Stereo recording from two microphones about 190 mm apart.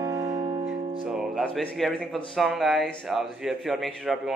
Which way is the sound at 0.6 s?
Centre (ahead or behind).